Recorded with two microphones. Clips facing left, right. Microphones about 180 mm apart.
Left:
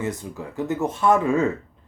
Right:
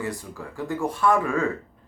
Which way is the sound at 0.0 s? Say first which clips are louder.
Left 3 dB; 20° left (ahead or behind).